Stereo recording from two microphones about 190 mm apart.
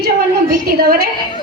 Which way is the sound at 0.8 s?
50° right (ahead or behind).